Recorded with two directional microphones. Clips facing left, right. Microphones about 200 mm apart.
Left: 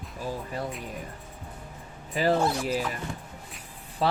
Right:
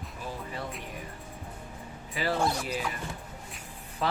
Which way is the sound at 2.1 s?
40° left (ahead or behind).